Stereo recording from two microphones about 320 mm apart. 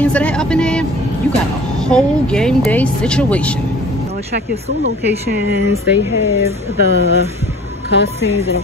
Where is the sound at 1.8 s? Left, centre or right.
Centre.